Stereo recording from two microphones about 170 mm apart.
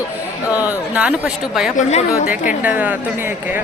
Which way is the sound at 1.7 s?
40° left (ahead or behind).